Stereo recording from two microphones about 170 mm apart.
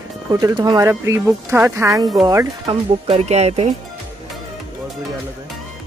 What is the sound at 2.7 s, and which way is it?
Speech, 35° right (ahead or behind).